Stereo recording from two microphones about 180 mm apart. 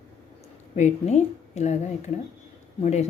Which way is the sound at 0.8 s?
40° left (ahead or behind).